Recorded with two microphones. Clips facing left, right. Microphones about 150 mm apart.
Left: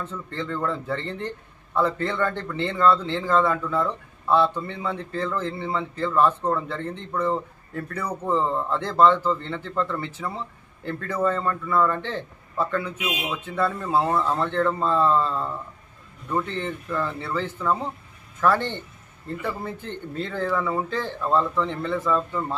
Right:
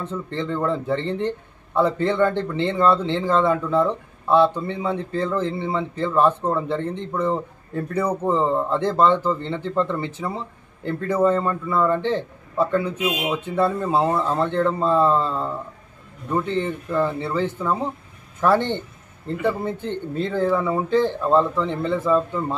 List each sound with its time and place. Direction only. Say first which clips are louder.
0.0 s speech: right 4 dB; 20° right (ahead or behind)